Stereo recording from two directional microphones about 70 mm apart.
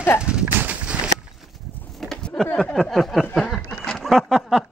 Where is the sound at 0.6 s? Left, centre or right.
Right.